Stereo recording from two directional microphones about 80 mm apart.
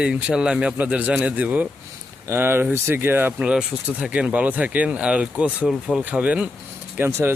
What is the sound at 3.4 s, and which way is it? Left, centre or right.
Speech, centre.